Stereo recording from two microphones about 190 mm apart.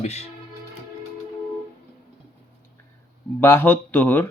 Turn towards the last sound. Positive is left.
turn(degrees=10)  # may be behind; listen again after turning